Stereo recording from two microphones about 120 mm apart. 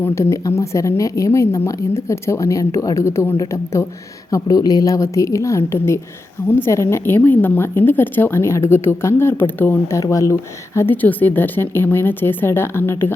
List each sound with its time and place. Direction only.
0.0 s a woman's voice: 20° left (ahead or behind)
10.8 s a woman's voice: 15° left (ahead or behind)